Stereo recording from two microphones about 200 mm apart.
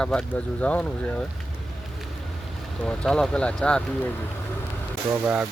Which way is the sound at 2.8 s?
5° left (ahead or behind).